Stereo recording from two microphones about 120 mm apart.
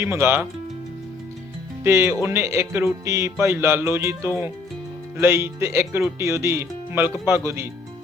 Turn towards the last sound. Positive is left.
turn(degrees=-20)  # may be behind; listen again after turning